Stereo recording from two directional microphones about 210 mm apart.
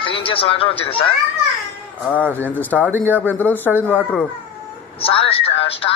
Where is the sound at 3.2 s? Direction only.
10° left (ahead or behind).